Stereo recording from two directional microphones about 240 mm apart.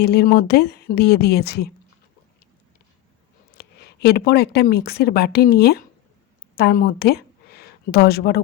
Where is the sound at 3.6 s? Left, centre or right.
Left.